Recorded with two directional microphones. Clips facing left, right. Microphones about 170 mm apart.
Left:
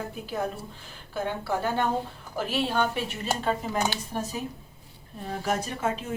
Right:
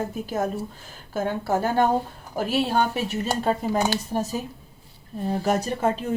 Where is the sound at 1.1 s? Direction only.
45° right (ahead or behind).